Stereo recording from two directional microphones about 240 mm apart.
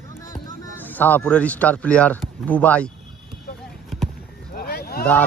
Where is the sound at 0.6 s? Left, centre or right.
Centre.